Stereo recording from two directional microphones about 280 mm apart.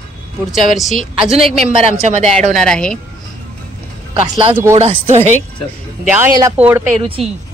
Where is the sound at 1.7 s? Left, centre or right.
Right.